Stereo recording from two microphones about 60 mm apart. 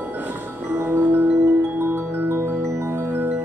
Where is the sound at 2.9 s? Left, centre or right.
Right.